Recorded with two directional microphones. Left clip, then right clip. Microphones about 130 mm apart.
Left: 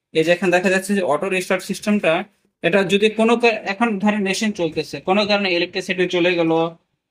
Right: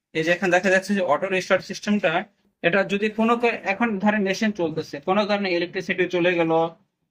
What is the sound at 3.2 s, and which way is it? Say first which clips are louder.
Speech: left 4 dB; 40° left (ahead or behind).